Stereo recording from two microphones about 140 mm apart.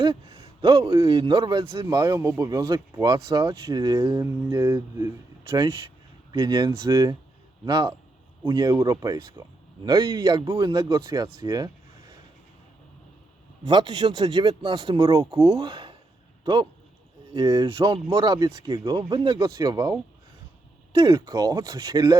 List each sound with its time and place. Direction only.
0.0 s a sound: 30° right (ahead or behind)
0.9 s speech: 25° right (ahead or behind)
1.9 s speech: 25° right (ahead or behind)
4.1 s speech: 20° right (ahead or behind)
13.7 s speech: 30° right (ahead or behind)
17.3 s speech: 25° right (ahead or behind)
17.7 s speech: 35° right (ahead or behind)
21.0 s speech: 25° right (ahead or behind)